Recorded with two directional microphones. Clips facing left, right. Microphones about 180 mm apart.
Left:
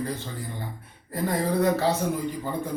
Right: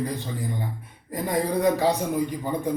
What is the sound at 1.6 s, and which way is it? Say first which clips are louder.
Speech: right 2 dB; 15° right (ahead or behind).